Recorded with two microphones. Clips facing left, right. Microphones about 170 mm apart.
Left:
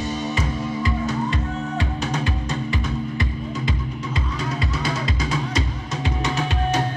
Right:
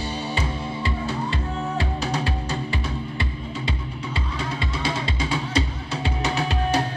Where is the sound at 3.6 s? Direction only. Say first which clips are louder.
Left 3 dB; 30° right (ahead or behind).